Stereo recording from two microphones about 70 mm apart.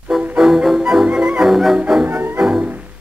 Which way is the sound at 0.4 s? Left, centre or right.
Centre.